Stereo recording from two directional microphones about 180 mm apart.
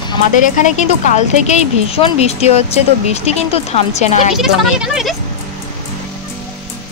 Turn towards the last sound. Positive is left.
turn(degrees=-5)  # may be behind; listen again after turning